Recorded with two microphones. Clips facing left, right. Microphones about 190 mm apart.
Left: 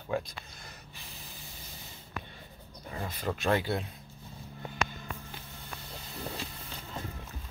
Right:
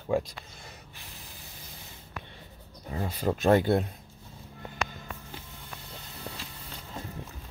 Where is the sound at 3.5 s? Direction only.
50° right (ahead or behind).